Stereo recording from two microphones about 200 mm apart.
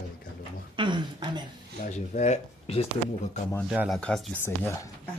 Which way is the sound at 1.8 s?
35° left (ahead or behind).